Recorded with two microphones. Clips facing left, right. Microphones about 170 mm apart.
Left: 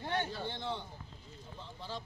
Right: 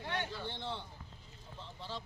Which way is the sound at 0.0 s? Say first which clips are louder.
Left 3 dB; 35° left (ahead or behind).